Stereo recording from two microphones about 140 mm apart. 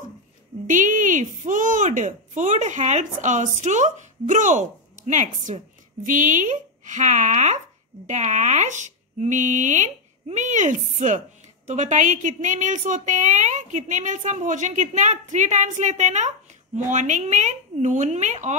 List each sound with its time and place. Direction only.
0.7 s speech: 65° right (ahead or behind)
6.0 s speech: 70° right (ahead or behind)